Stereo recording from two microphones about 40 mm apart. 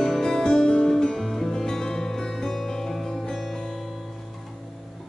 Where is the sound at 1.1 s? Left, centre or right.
Centre.